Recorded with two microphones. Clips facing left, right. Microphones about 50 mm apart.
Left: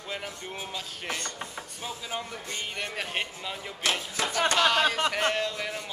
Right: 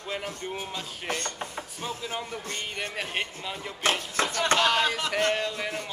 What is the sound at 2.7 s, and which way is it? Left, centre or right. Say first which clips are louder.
Speech: even; centre.